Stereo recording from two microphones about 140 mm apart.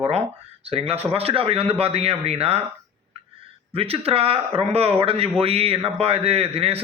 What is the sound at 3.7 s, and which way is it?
A man's voice, 45° right (ahead or behind).